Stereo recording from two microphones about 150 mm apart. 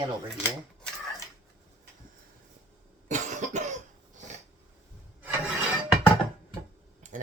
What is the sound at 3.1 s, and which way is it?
Cough, 55° right (ahead or behind).